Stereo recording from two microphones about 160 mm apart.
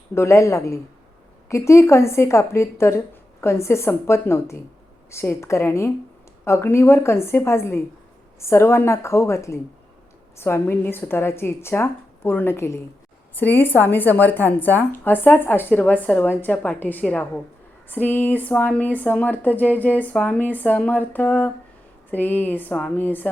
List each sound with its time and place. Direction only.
0.1 s a man's voice: 15° left (ahead or behind)